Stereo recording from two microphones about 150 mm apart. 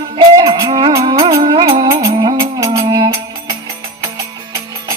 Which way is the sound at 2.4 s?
20° right (ahead or behind).